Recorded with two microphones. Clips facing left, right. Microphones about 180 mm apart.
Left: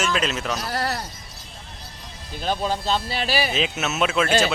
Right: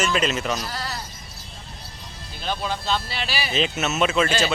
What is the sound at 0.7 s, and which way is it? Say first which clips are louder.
Sheep: left 6 dB; 65° left (ahead or behind).